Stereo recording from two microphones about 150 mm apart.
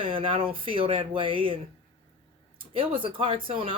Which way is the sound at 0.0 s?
35° right (ahead or behind).